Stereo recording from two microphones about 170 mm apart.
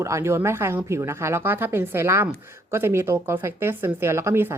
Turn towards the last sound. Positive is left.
turn(degrees=-15)  # may be behind; listen again after turning